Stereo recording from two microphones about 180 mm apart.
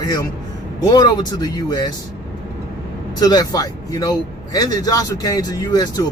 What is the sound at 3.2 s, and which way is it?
Speech, 20° left (ahead or behind).